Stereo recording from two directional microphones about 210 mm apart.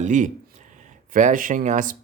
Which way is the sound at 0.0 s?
35° right (ahead or behind).